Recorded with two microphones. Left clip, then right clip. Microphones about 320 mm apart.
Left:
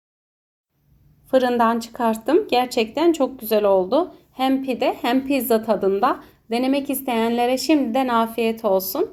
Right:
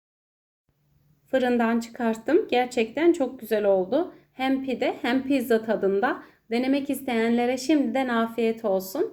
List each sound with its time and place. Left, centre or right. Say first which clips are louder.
1.4 s speech: left 6 dB; left